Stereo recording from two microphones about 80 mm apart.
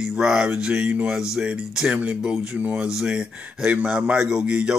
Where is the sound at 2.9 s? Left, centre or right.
Centre.